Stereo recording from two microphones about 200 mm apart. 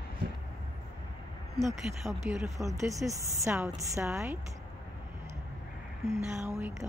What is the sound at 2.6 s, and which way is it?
Speech, 15° right (ahead or behind).